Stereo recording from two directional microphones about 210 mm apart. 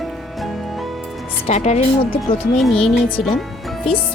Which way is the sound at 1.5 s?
30° left (ahead or behind).